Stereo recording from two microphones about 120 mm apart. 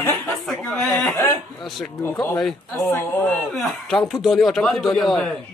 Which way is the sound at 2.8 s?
20° left (ahead or behind).